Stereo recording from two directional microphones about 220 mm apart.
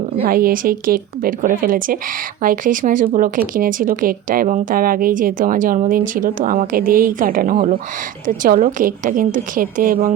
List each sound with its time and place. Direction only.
0.3 s speech: 40° right (ahead or behind)